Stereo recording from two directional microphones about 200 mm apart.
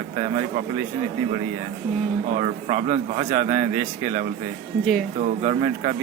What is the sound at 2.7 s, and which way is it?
Speech, 35° right (ahead or behind).